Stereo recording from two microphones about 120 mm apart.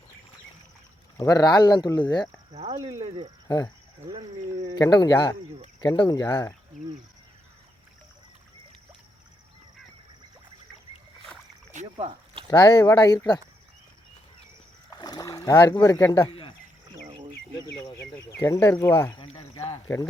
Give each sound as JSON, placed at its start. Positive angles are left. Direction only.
{"t": 1.1, "sound": "speech", "side_deg": 30}
{"t": 2.5, "sound": "cricket", "side_deg": -65}
{"t": 4.1, "sound": "a sound", "side_deg": -40}
{"t": 4.8, "sound": "speech", "side_deg": 30}
{"t": 11.7, "sound": "rowboat", "side_deg": -90}
{"t": 12.0, "sound": "a sound", "side_deg": -50}
{"t": 12.5, "sound": "speech", "side_deg": 40}
{"t": 14.8, "sound": "boat", "side_deg": 35}
{"t": 16.2, "sound": "a sound", "side_deg": 45}
{"t": 18.3, "sound": "speech", "side_deg": 20}
{"t": 19.1, "sound": "a sound", "side_deg": 50}
{"t": 19.7, "sound": "speech", "side_deg": 25}